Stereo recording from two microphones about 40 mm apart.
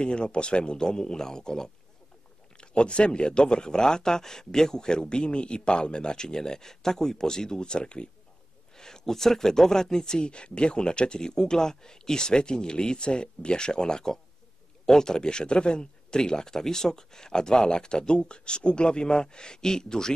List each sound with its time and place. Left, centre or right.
0.0 s speech: left